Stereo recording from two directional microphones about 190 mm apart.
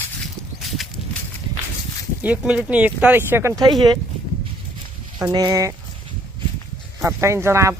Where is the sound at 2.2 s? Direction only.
5° right (ahead or behind).